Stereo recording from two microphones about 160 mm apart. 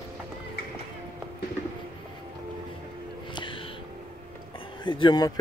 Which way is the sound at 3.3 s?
30° left (ahead or behind).